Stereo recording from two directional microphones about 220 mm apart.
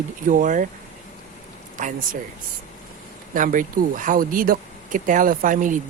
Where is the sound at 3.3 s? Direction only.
40° right (ahead or behind).